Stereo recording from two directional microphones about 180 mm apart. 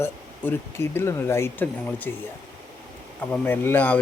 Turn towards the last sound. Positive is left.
turn(degrees=10)  # may be behind; listen again after turning